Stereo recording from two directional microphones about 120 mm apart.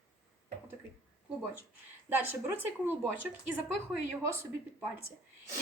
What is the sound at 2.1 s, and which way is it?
A woman's voice, 20° right (ahead or behind).